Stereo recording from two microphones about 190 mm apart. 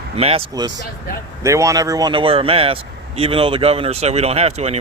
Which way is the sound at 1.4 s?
15° right (ahead or behind).